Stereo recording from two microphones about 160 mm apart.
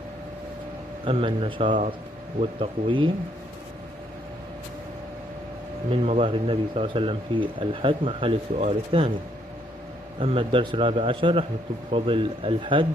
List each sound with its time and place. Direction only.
1.0 s speech: 35° right (ahead or behind)
5.9 s speech: 40° right (ahead or behind)
10.1 s speech: 35° right (ahead or behind)